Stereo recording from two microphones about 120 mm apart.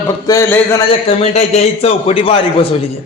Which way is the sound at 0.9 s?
55° left (ahead or behind).